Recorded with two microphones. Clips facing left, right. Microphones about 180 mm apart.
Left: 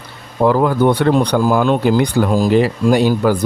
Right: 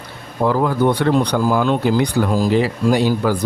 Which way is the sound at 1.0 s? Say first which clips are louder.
Left 3 dB; 50° left (ahead or behind).